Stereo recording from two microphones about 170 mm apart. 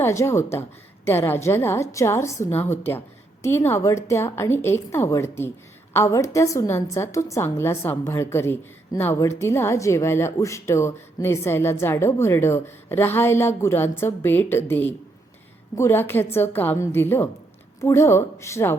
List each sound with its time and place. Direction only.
0.0 s a woman's voice: 15° left (ahead or behind)